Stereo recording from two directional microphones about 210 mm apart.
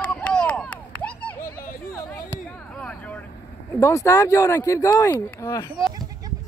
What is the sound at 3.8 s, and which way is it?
Speech, 15° left (ahead or behind).